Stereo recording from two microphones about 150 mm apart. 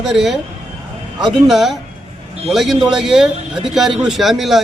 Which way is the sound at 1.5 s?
Centre (ahead or behind).